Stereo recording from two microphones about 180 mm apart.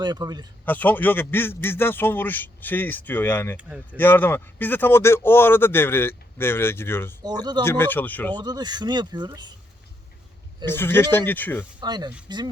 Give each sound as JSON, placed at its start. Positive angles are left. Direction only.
{"t": 0.0, "sound": "speech", "side_deg": -20}
{"t": 0.6, "sound": "speech", "side_deg": 10}
{"t": 3.6, "sound": "speech", "side_deg": -10}
{"t": 3.9, "sound": "speech", "side_deg": 10}
{"t": 7.2, "sound": "speech", "side_deg": -25}
{"t": 7.6, "sound": "speech", "side_deg": 10}
{"t": 8.4, "sound": "speech", "side_deg": -25}
{"t": 10.7, "sound": "speech", "side_deg": 10}
{"t": 11.8, "sound": "speech", "side_deg": -25}